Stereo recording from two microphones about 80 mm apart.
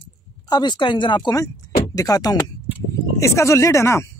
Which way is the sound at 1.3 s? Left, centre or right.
Left.